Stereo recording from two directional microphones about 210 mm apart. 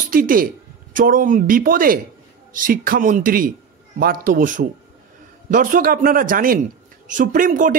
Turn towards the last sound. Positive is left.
turn(degrees=-40)  # may be behind; listen again after turning